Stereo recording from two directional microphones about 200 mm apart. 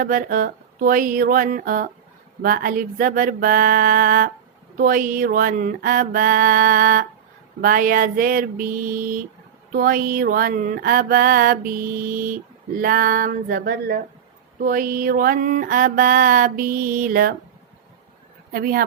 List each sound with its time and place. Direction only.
0.0 s mantra: 45° right (ahead or behind)
18.5 s mantra: 45° right (ahead or behind)